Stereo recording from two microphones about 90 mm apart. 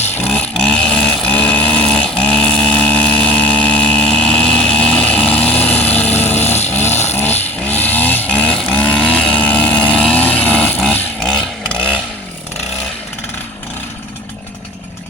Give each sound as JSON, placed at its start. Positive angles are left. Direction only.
{"t": 0.3, "sound": "vehicle", "side_deg": 10}
{"t": 3.3, "sound": "vehicle", "side_deg": 80}
{"t": 3.7, "sound": "vehicle", "side_deg": 10}
{"t": 11.2, "sound": "chainsaw", "side_deg": 5}